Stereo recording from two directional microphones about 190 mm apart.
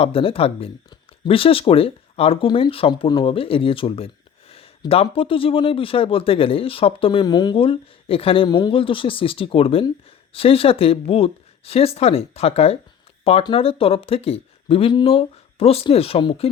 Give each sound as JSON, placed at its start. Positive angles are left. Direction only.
{"t": 0.0, "sound": "speech", "side_deg": 30}